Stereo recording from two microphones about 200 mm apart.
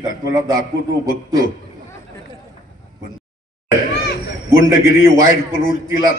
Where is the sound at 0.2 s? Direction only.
15° right (ahead or behind).